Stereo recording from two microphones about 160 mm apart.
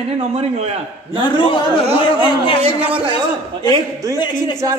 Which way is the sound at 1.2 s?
30° left (ahead or behind).